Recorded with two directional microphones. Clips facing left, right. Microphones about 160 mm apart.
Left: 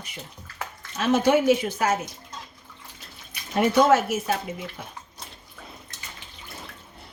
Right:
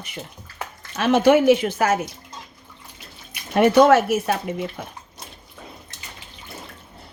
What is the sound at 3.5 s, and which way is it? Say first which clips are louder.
Speech: right 5 dB; 65° right (ahead or behind).